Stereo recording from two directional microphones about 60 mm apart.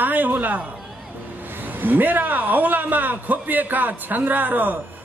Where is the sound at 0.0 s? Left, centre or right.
Right.